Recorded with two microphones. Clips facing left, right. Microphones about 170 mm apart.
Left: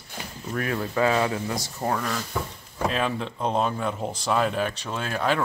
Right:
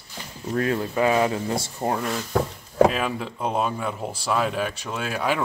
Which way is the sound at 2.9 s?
5° right (ahead or behind).